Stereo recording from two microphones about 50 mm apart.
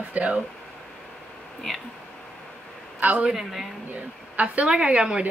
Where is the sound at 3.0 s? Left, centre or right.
Right.